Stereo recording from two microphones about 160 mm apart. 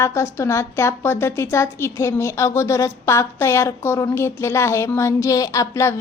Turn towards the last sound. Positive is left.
turn(degrees=20)  # may be behind; listen again after turning